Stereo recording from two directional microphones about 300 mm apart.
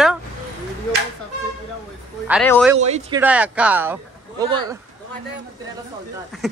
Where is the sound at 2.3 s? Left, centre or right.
Centre.